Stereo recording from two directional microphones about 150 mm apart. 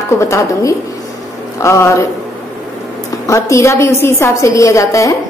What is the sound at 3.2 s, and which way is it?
A woman's voice, 20° left (ahead or behind).